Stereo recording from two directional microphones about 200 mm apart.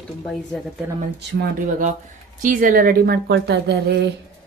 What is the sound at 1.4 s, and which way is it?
A woman's voice, 40° right (ahead or behind).